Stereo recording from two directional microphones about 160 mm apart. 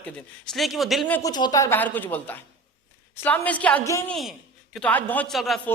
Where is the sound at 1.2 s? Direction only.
25° left (ahead or behind); by 5.5 s centre (ahead or behind).